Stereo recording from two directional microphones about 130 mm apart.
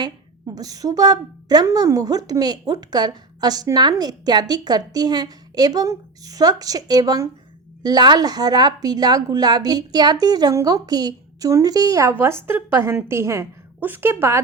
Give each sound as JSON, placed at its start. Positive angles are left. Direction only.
{"t": 0.0, "sound": "a woman's voice", "side_deg": -30}